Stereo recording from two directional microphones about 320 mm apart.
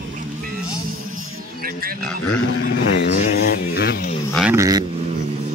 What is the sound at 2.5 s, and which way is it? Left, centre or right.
Speech, left.